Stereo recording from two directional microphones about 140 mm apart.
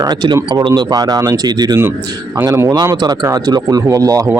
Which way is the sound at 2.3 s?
20° right (ahead or behind).